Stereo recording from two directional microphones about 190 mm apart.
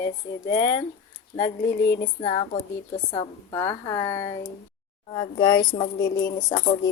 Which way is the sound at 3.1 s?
20° left (ahead or behind).